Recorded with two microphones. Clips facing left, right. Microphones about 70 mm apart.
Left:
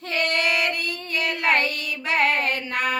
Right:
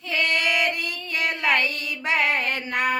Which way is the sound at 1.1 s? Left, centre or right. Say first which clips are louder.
Even; right.